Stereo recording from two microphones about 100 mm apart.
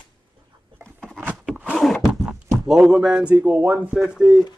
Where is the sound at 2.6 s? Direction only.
5° right (ahead or behind).